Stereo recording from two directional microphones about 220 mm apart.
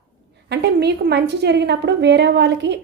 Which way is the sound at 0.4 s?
50° right (ahead or behind).